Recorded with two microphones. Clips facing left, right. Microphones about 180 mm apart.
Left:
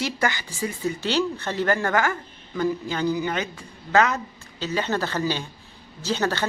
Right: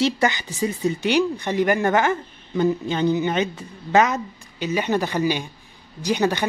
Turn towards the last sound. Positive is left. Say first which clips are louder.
# right 4 dB
turn(degrees=-15)  # may be behind; listen again after turning